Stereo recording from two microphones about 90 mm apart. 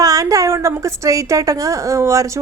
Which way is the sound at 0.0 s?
40° right (ahead or behind).